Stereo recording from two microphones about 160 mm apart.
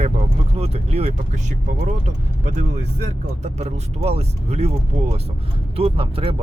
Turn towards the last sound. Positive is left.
turn(degrees=-35)  # may be behind; listen again after turning